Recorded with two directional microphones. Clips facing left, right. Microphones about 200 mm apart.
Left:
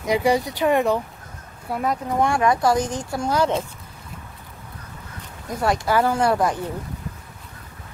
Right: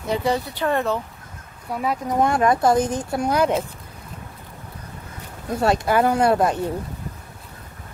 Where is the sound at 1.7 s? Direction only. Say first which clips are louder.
Left 1 dB; centre (ahead or behind).